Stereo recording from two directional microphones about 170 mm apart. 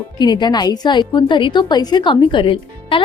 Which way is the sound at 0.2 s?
25° left (ahead or behind).